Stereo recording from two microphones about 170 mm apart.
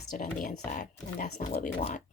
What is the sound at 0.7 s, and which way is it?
Speech, 55° left (ahead or behind).